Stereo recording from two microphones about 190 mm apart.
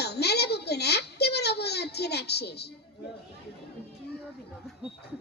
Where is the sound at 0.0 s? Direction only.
60° left (ahead or behind).